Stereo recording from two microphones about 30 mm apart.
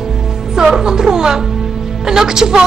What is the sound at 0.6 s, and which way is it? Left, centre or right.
A woman's voice, centre.